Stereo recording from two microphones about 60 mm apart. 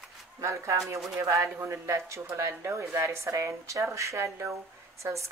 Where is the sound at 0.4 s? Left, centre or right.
Right.